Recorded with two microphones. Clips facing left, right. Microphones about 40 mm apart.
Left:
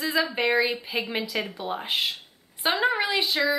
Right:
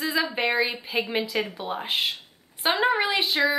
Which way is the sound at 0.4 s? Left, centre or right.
Centre.